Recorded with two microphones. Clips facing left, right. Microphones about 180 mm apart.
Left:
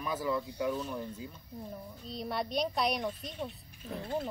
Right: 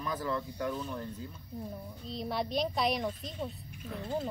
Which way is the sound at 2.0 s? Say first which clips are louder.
Right 1 dB; centre (ahead or behind).